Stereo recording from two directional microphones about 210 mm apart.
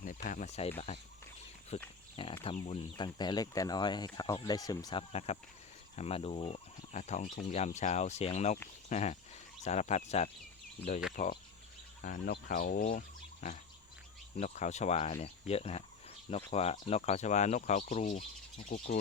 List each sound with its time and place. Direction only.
0.0 s speech: 40° left (ahead or behind)
1.7 s speech: 30° left (ahead or behind)